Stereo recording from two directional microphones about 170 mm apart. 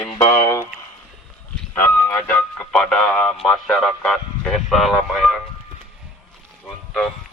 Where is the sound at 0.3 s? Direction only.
15° left (ahead or behind).